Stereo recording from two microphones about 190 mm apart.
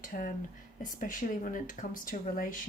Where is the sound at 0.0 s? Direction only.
45° left (ahead or behind).